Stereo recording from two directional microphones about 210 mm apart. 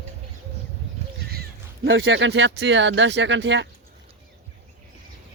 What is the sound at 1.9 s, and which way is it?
Speech, 60° right (ahead or behind).